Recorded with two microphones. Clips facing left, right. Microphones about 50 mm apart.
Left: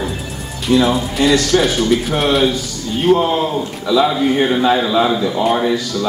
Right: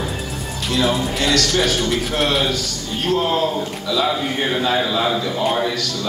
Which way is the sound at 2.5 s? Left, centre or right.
Left.